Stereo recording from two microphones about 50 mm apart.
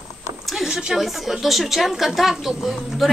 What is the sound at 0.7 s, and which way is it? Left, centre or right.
A woman's voice, centre.